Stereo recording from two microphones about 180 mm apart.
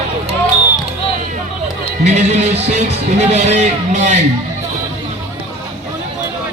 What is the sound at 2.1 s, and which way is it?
Speech, 40° right (ahead or behind).